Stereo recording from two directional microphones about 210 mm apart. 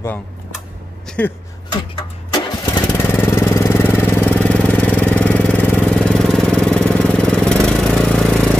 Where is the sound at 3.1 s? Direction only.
10° left (ahead or behind).